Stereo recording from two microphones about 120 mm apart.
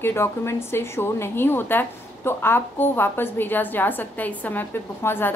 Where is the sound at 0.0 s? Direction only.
20° left (ahead or behind).